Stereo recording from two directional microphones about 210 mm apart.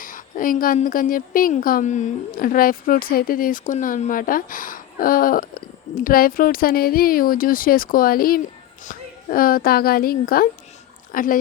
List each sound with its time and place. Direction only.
0.0 s a woman's voice: 40° left (ahead or behind)